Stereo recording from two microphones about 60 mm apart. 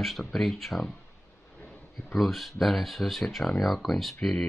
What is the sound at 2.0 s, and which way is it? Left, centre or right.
Speech, centre.